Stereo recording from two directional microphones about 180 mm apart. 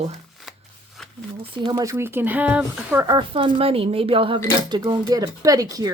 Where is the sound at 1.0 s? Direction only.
Centre (ahead or behind).